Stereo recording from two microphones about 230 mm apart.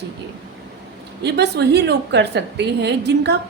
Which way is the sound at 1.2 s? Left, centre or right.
Right.